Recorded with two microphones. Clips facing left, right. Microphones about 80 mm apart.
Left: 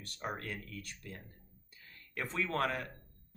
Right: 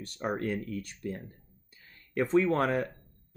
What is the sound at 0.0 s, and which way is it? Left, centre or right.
Speech, right.